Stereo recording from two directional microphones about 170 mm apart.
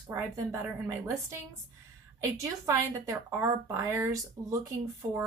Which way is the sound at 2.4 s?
15° right (ahead or behind).